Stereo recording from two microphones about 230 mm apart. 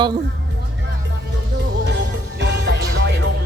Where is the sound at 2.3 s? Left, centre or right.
Right.